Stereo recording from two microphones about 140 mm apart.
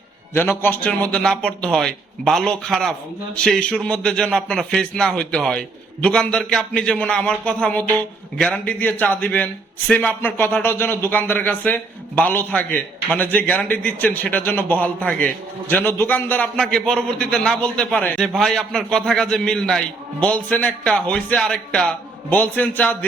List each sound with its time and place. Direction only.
0.3 s a man's voice: 15° left (ahead or behind)